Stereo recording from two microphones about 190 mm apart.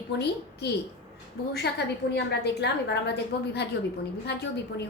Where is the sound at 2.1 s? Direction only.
60° left (ahead or behind).